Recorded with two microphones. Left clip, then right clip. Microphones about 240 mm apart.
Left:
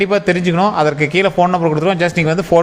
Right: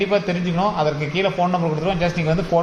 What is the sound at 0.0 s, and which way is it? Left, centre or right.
A man's voice, left.